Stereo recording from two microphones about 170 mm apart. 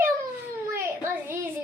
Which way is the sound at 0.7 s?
15° right (ahead or behind).